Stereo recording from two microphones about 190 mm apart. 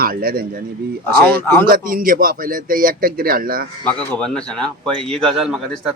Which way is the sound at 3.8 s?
5° left (ahead or behind).